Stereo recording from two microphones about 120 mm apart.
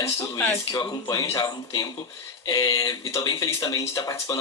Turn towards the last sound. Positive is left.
turn(degrees=30)  # may be behind; listen again after turning